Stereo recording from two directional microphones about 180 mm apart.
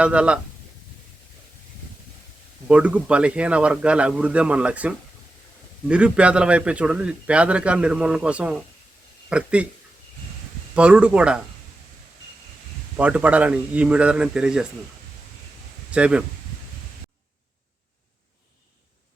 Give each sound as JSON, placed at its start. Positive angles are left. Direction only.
{"t": 0.0, "sound": "a man's voice", "side_deg": -5}
{"t": 2.6, "sound": "a man's voice", "side_deg": -5}
{"t": 10.8, "sound": "a man's voice", "side_deg": -5}
{"t": 13.0, "sound": "a man's voice", "side_deg": -10}
{"t": 15.9, "sound": "a man's voice", "side_deg": -5}